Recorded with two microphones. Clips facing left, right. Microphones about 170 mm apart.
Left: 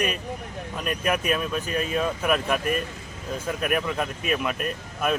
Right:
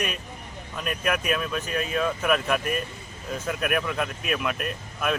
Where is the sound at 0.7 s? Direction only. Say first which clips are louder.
Left 1 dB; centre (ahead or behind).